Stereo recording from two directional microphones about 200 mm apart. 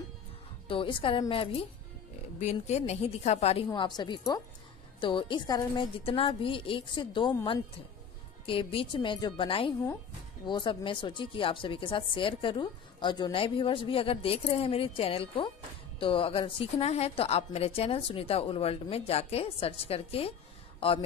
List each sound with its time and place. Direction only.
0.7 s speech: 25° left (ahead or behind)